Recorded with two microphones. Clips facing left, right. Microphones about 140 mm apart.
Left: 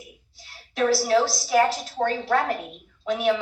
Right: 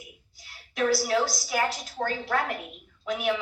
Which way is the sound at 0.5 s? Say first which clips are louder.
Left 3 dB; 25° left (ahead or behind).